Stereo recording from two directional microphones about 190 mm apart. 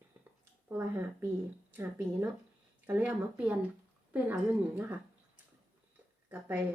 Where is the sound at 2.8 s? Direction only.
10° right (ahead or behind).